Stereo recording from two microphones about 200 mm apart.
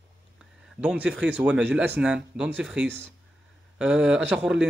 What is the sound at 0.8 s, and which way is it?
Speech, 5° right (ahead or behind).